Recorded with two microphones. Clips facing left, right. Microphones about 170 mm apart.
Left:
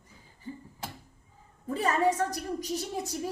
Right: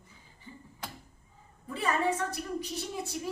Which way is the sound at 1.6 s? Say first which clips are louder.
Left 4 dB; 40° left (ahead or behind).